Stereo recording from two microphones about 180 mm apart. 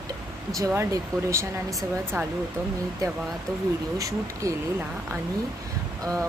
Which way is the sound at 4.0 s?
20° right (ahead or behind).